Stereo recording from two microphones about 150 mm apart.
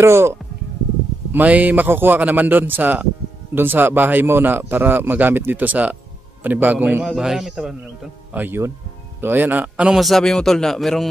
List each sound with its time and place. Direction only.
0.0 s a man's voice: 15° right (ahead or behind); by 11.1 s centre (ahead or behind)